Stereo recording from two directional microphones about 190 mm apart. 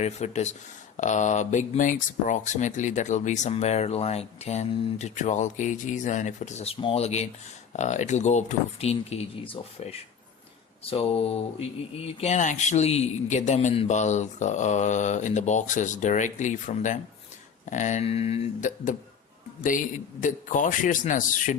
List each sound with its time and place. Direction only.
0.0 s speech: 35° left (ahead or behind)
20.2 s a man's voice: 40° left (ahead or behind)